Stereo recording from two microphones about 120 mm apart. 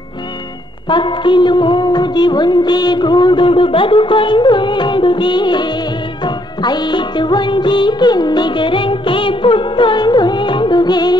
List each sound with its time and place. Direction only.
0.8 s music: 40° left (ahead or behind)